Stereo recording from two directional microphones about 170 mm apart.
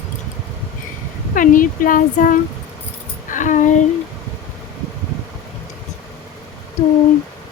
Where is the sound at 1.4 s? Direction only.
55° left (ahead or behind).